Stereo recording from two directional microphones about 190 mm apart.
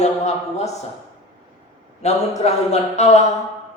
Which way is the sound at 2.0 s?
35° left (ahead or behind).